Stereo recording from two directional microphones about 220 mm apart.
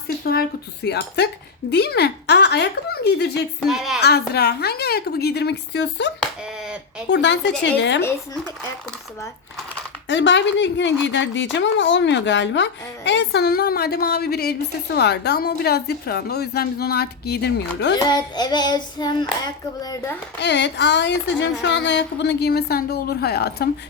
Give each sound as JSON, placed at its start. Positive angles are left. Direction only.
{"t": 0.3, "sound": "speech", "side_deg": 45}
{"t": 3.7, "sound": "a woman's voice", "side_deg": 0}
{"t": 4.0, "sound": "speech", "side_deg": 50}
{"t": 7.1, "sound": "speech", "side_deg": 55}
{"t": 10.1, "sound": "speech", "side_deg": 55}
{"t": 17.9, "sound": "child singing", "side_deg": 20}
{"t": 19.8, "sound": "a child's voice", "side_deg": 15}
{"t": 20.4, "sound": "speech", "side_deg": 50}